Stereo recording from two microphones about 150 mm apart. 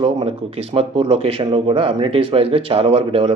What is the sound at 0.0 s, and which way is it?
Speech, 40° right (ahead or behind).